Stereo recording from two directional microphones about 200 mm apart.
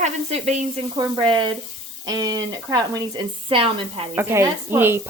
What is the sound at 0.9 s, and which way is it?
Speech, 20° right (ahead or behind).